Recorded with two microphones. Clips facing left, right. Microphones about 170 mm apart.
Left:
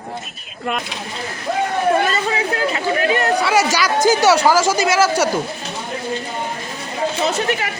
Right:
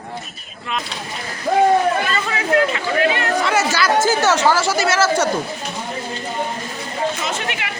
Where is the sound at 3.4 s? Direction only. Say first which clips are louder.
Left 2 dB; 10° left (ahead or behind).